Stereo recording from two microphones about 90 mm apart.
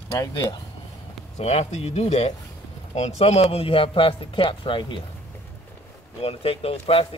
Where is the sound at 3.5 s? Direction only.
90° left; by 5.0 s 70° left (ahead or behind).